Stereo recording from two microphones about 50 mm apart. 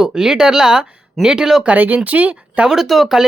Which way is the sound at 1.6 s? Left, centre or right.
Right.